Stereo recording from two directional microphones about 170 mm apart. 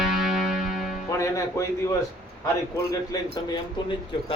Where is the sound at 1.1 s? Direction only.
20° left (ahead or behind).